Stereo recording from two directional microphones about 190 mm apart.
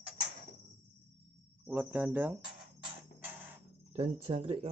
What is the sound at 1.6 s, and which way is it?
Speech, 10° right (ahead or behind).